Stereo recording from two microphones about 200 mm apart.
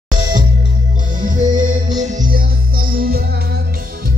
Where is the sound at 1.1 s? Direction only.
40° right (ahead or behind).